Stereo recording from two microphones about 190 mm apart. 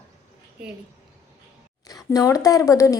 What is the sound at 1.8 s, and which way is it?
Speech, 20° left (ahead or behind).